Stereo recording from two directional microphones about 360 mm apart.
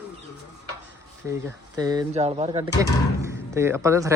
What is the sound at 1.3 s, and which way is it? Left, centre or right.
Speech, centre.